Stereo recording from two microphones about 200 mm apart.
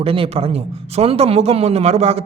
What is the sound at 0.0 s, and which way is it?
A man's voice, 30° right (ahead or behind).